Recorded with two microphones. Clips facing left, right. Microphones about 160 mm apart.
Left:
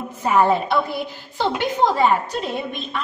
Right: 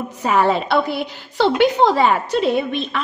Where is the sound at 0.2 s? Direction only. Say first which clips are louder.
Even; 90° right.